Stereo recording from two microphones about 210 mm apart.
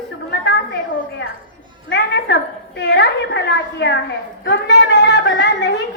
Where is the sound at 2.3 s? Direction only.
55° left (ahead or behind).